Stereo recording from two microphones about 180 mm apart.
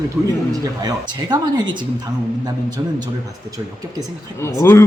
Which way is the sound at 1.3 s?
25° right (ahead or behind).